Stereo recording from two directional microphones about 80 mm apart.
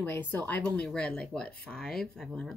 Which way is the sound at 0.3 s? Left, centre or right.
Left.